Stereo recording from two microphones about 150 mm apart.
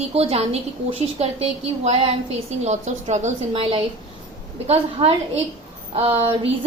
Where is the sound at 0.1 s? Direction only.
45° right (ahead or behind).